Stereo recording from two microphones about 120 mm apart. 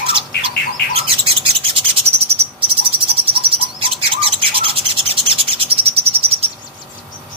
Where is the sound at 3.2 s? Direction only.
50° right (ahead or behind).